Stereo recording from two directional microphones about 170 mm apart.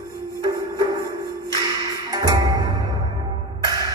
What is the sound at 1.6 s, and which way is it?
Music, 20° right (ahead or behind).